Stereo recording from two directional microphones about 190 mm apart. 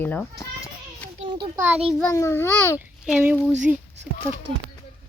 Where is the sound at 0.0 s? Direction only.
10° left (ahead or behind).